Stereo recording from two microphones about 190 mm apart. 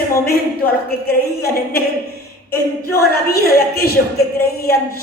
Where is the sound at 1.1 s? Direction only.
55° left (ahead or behind).